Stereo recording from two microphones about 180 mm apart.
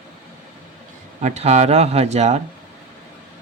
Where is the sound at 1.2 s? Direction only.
35° right (ahead or behind).